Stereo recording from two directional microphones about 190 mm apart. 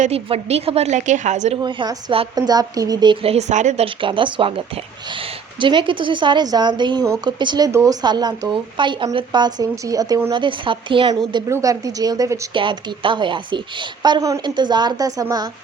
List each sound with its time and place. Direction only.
0.0 s a woman's voice: 35° right (ahead or behind)
1.6 s a woman's voice: 25° right (ahead or behind)
4.0 s a woman's voice: 25° right (ahead or behind)